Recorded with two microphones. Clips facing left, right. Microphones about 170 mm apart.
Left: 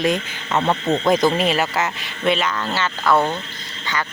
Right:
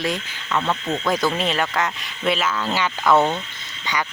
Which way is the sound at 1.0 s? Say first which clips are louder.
Left 5 dB; 20° left (ahead or behind).